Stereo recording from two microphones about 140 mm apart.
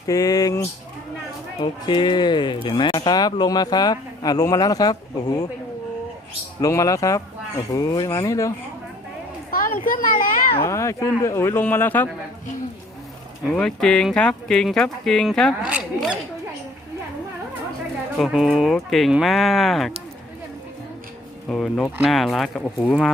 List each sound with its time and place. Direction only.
0.1 s speech: 25° left (ahead or behind)
1.6 s speech: 35° left (ahead or behind)
6.6 s speech: 25° left (ahead or behind)
9.5 s speech: 85° left
10.6 s speech: 20° left (ahead or behind)
13.5 s speech: 5° left (ahead or behind)
18.2 s speech: 5° right (ahead or behind)
21.5 s speech: 5° left (ahead or behind)